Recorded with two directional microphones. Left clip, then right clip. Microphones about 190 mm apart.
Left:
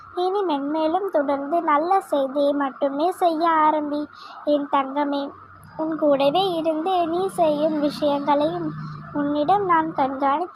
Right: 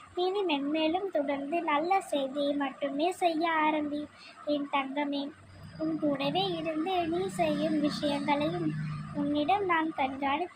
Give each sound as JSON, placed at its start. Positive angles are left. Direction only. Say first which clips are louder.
{"t": 0.2, "sound": "speech", "louder": "left 7 dB", "side_deg": 20}